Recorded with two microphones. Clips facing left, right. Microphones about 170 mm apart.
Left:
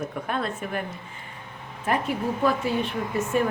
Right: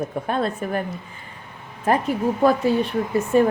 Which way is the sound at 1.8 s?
40° right (ahead or behind).